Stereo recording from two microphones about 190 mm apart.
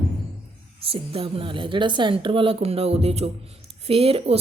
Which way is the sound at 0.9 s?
30° right (ahead or behind).